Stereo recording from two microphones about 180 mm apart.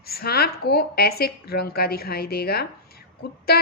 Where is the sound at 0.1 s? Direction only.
60° left (ahead or behind).